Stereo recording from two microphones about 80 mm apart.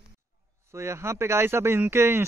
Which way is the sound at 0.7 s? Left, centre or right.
Right.